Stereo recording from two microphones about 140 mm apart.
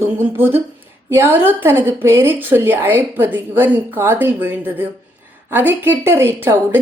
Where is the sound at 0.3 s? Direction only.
15° right (ahead or behind).